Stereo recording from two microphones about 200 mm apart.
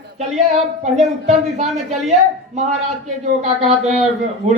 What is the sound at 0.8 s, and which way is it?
A man's voice, 35° right (ahead or behind).